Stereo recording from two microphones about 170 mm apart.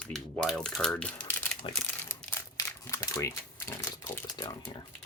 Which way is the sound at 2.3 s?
20° left (ahead or behind).